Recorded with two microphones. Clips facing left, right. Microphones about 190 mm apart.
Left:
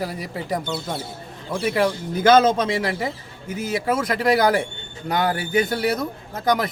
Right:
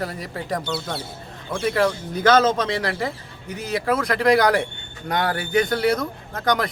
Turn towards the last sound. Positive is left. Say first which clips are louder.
# left 1 dB
turn(degrees=5)  # may be behind; listen again after turning